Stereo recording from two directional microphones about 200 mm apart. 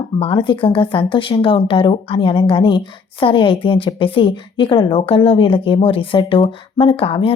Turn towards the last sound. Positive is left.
turn(degrees=25)  # may be behind; listen again after turning